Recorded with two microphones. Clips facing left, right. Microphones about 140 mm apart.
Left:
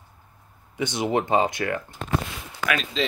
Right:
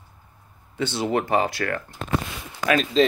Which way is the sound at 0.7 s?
15° left (ahead or behind).